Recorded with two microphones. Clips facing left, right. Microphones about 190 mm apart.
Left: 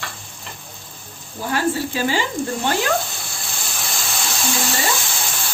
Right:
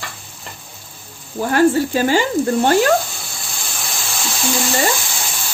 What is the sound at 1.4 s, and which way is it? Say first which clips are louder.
Speech: right 7 dB; 50° right (ahead or behind).